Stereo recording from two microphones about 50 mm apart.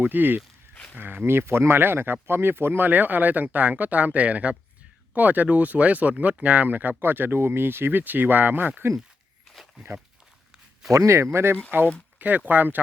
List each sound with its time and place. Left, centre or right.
0.0 s speech: right
0.7 s a sound: left
0.9 s speech: right
1.2 s speech: right
10.9 s speech: right
12.5 s speech: right